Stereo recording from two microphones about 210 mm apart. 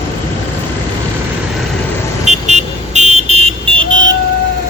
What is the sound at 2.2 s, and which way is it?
Vehicle, 30° right (ahead or behind).